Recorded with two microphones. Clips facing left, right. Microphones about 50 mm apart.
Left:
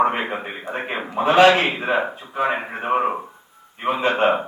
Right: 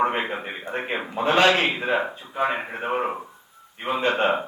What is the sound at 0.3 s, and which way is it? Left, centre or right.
Speech, centre.